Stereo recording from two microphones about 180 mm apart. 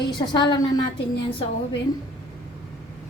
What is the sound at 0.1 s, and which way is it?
Speech, 25° left (ahead or behind).